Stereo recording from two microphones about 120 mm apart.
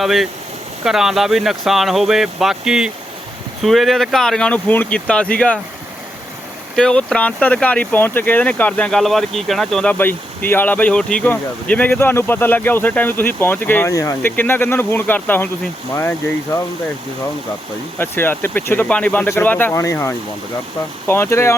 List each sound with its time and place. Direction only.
0.0 s speech: centre (ahead or behind)
6.7 s speech: 5° left (ahead or behind)
13.9 s speech: 25° left (ahead or behind)
18.0 s speech: 15° left (ahead or behind)